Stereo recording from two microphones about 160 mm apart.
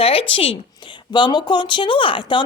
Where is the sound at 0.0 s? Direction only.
35° left (ahead or behind).